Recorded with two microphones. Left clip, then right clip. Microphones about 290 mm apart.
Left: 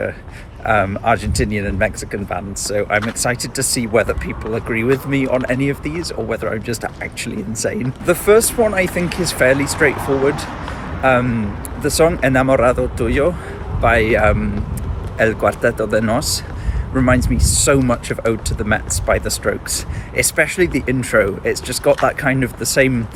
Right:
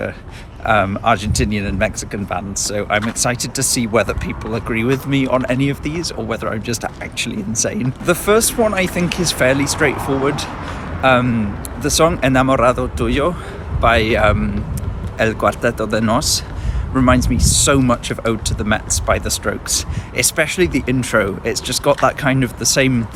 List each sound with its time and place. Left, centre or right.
0.6 s speech: centre
10.0 s speech: left
11.0 s speech: centre